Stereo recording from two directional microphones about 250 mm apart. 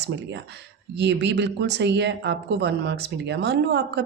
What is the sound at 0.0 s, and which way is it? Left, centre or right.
A woman's voice, right.